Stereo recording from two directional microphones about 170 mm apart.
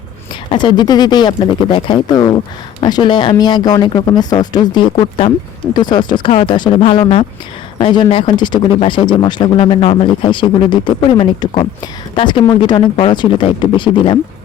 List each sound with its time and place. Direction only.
0.5 s speech: 25° left (ahead or behind)